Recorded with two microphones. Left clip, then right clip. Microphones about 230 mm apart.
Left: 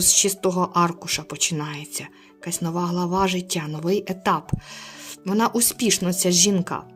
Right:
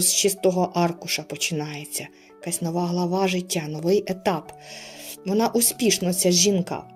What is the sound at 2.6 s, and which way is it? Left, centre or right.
Speech, left.